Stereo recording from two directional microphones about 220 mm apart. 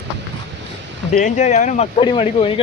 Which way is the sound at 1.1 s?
35° left (ahead or behind).